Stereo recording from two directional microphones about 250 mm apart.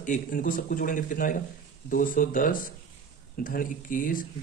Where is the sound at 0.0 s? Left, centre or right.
Left.